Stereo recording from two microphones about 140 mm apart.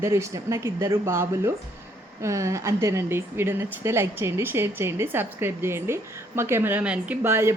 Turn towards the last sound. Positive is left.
turn(degrees=-20)  # may be behind; listen again after turning